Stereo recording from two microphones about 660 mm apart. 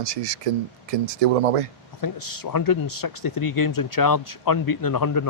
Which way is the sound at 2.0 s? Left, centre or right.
Left.